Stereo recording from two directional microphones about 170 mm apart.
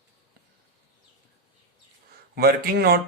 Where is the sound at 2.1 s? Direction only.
65° right (ahead or behind).